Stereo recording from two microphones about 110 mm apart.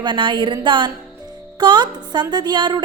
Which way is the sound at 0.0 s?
45° right (ahead or behind).